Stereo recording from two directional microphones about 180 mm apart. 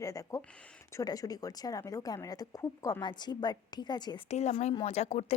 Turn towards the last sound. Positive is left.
turn(degrees=35)  # may be behind; listen again after turning